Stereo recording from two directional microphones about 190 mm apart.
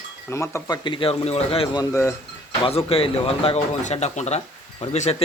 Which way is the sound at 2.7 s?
30° left (ahead or behind).